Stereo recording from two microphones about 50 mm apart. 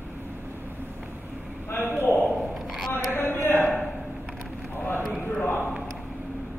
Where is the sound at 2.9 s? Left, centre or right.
Left.